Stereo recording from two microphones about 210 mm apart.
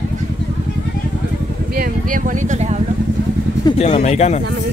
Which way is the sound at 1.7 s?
40° right (ahead or behind).